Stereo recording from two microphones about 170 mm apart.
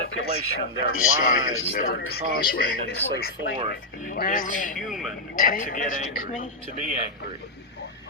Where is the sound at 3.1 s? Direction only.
65° left (ahead or behind).